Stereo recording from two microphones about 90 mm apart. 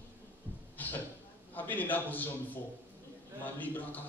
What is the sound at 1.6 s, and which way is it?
A man's voice, 20° left (ahead or behind).